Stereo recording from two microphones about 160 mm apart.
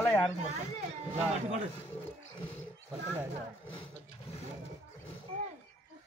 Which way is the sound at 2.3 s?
30° left (ahead or behind).